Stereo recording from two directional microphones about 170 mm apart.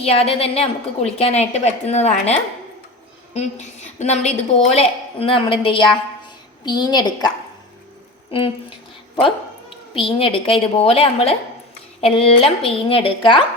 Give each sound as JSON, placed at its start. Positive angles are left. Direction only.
{"t": 0.0, "sound": "a woman's voice", "side_deg": 35}
{"t": 3.3, "sound": "a woman's voice", "side_deg": 40}
{"t": 9.9, "sound": "a woman's voice", "side_deg": 30}